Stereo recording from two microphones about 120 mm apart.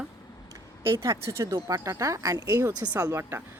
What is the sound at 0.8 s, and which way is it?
Speech, 20° right (ahead or behind).